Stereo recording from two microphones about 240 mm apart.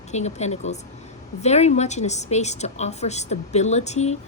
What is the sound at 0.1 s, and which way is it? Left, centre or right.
Speech, left.